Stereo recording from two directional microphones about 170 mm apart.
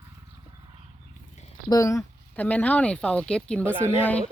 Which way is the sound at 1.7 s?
20° left (ahead or behind).